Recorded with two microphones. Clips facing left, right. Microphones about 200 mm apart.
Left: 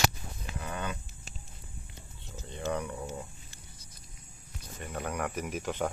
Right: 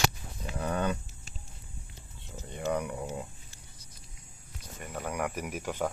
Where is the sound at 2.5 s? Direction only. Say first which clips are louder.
Right 2 dB; 10° right (ahead or behind).